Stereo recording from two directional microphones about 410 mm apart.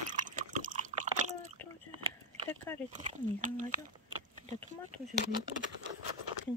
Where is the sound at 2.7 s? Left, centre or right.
Centre.